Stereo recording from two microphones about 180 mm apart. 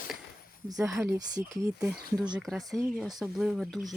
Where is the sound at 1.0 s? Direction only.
15° right (ahead or behind).